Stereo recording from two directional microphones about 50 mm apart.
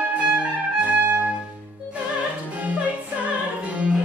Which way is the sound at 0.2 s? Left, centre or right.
Right.